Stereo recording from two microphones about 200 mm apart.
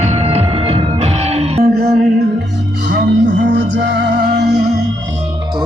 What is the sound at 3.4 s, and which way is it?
Music, 60° right (ahead or behind).